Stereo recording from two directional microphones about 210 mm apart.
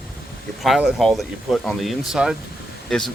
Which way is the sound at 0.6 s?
Centre (ahead or behind).